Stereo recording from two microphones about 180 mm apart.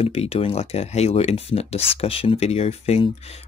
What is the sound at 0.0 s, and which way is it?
Speech, 35° left (ahead or behind).